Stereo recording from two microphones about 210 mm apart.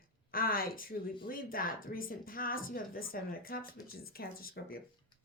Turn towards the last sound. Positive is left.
turn(degrees=45)  # may be behind; listen again after turning